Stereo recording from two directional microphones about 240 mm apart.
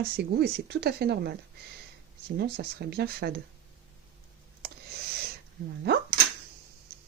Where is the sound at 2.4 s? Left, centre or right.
Right.